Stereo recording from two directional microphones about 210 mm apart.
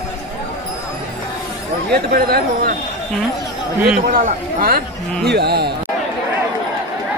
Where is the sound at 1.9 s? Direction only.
45° right (ahead or behind).